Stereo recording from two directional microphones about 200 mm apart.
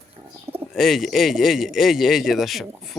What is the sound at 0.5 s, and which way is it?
Speech, 5° right (ahead or behind).